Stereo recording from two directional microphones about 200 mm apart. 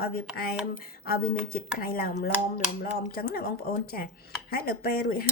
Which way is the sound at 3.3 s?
50° left (ahead or behind).